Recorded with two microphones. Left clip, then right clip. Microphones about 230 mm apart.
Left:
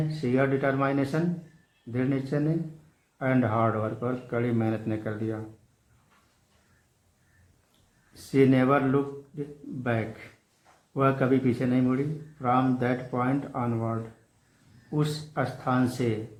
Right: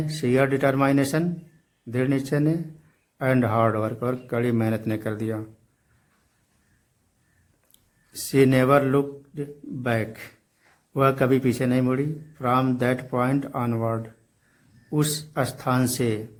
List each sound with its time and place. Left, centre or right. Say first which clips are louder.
0.1 s a man's voice: right 5 dB; right
8.3 s a man's voice: right 4 dB; right